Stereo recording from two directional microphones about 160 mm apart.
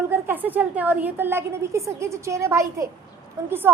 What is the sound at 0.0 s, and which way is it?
A woman's voice, 15° right (ahead or behind).